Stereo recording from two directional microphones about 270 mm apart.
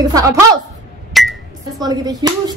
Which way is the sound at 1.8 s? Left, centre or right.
Centre.